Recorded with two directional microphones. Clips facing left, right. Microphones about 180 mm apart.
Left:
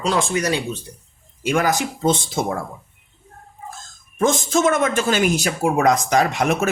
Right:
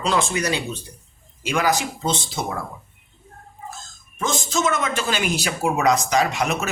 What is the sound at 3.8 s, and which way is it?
Speech, 55° left (ahead or behind).